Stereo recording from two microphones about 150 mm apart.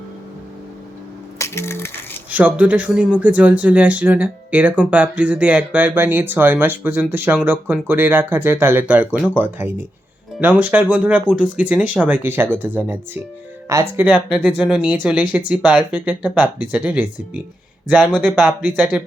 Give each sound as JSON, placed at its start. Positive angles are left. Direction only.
{"t": 1.4, "sound": "coin", "side_deg": 15}
{"t": 2.3, "sound": "speech", "side_deg": -10}